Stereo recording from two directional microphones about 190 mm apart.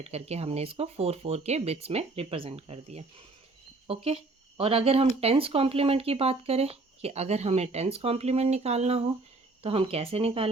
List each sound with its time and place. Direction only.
0.0 s speech: 35° right (ahead or behind)